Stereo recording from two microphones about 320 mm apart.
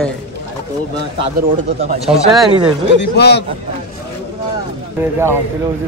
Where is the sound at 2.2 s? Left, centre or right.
Centre.